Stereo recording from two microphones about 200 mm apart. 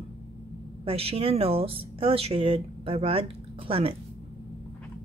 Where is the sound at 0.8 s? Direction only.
30° right (ahead or behind).